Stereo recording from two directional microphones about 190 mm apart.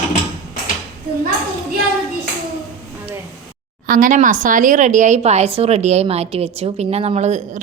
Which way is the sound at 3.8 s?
45° right (ahead or behind).